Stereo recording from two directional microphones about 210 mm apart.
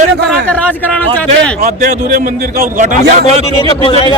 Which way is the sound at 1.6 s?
40° right (ahead or behind).